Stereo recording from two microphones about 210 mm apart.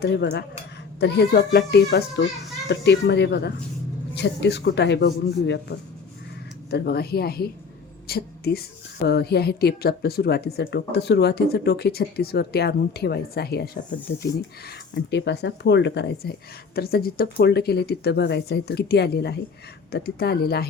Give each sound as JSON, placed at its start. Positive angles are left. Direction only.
{"t": 0.0, "sound": "a woman's voice", "side_deg": 50}